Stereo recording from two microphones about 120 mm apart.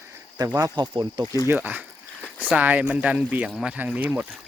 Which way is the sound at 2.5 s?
15° right (ahead or behind).